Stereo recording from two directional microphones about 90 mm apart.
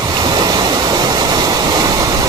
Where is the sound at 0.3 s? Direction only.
50° right (ahead or behind).